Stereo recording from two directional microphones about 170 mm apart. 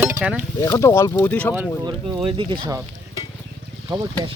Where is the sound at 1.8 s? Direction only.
25° right (ahead or behind).